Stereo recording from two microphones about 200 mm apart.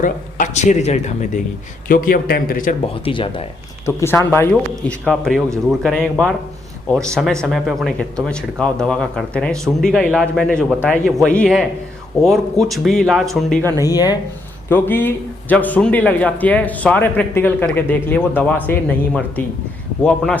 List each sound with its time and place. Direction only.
0.0 s speech: 40° left (ahead or behind)
2.8 s speech: 25° left (ahead or behind)
3.8 s a man's voice: 10° left (ahead or behind)